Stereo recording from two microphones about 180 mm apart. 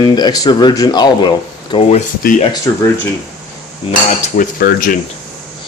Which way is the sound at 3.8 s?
30° left (ahead or behind).